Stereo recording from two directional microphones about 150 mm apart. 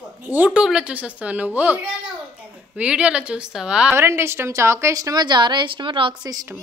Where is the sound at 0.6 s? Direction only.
5° right (ahead or behind).